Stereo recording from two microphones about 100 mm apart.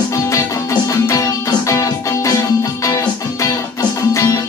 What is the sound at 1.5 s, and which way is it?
Music, 35° left (ahead or behind).